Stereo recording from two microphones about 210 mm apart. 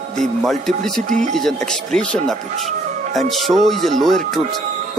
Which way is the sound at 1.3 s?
Centre (ahead or behind).